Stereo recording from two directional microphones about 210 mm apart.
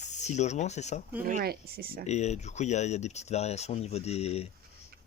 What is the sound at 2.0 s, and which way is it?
Speech, 30° left (ahead or behind).